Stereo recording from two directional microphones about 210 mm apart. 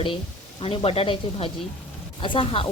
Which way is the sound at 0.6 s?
25° left (ahead or behind).